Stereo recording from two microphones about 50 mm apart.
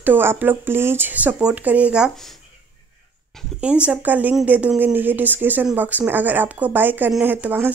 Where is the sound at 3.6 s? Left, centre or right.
Right.